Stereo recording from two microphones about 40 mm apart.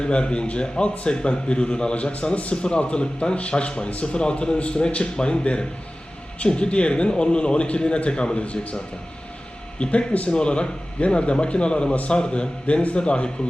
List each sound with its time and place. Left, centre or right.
0.0 s a man's voice: left